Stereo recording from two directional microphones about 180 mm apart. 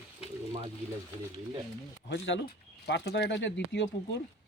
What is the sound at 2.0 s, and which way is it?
Speech, 80° left.